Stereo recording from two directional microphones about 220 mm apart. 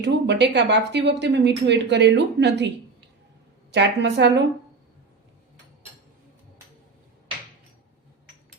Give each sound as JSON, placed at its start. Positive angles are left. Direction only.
{"t": 0.0, "sound": "speech", "side_deg": -50}